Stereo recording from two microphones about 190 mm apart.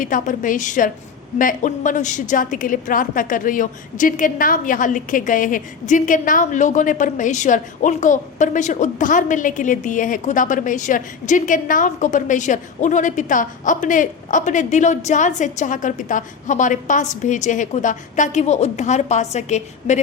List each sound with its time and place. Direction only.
0.0 s a woman's voice: 45° left (ahead or behind)